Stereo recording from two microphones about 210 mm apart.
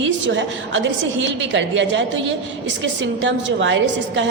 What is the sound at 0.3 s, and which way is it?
A woman's voice, 60° right (ahead or behind).